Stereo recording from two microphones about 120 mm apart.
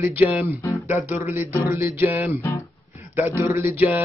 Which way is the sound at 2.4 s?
25° left (ahead or behind).